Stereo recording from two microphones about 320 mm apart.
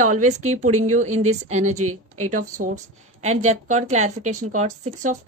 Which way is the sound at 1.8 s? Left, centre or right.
Right.